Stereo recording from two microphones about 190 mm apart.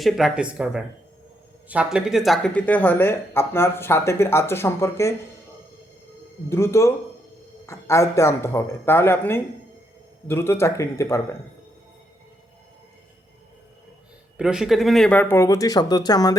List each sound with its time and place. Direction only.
0.0 s speech: centre (ahead or behind); by 5.1 s 15° left (ahead or behind)
6.5 s speech: 15° left (ahead or behind)
14.3 s speech: 5° right (ahead or behind); by 16.3 s 20° left (ahead or behind)